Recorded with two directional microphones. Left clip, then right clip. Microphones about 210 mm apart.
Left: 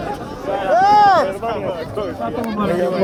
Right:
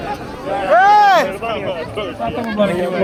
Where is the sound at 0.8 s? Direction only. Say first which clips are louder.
Right 2 dB; 20° left (ahead or behind).